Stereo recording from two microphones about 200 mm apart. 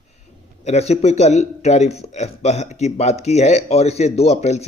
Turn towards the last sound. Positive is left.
turn(degrees=35)  # may be behind; listen again after turning